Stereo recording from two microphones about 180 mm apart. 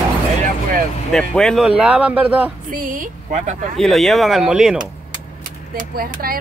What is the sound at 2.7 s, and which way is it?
Speech, 50° right (ahead or behind).